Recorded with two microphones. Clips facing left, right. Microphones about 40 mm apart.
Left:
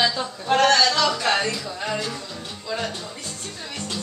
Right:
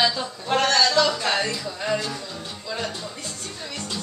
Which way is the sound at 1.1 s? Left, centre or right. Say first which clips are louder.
Left 2 dB; centre.